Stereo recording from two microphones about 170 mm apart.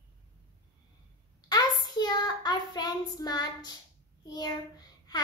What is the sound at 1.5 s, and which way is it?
Child singing, 25° left (ahead or behind).